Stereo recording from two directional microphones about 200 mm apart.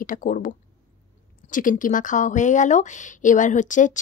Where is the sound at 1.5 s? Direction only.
40° left (ahead or behind).